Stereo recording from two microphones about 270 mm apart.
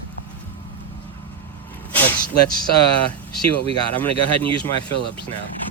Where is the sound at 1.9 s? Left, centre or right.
Centre.